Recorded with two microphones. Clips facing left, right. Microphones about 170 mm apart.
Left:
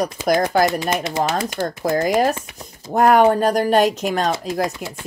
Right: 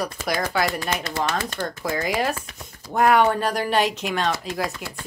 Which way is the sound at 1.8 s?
45° left (ahead or behind).